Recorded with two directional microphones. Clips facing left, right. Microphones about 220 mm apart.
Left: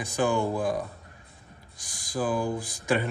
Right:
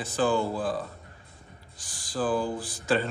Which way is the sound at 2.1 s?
10° left (ahead or behind).